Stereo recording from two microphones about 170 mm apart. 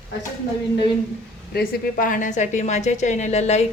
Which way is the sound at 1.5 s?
55° left (ahead or behind).